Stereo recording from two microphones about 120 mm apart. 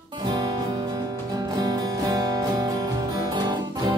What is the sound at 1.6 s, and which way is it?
Music, 35° right (ahead or behind).